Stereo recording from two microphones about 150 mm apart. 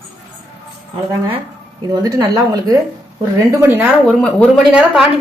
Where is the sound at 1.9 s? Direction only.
25° right (ahead or behind).